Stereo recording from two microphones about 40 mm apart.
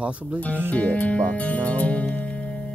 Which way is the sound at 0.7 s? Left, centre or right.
Left.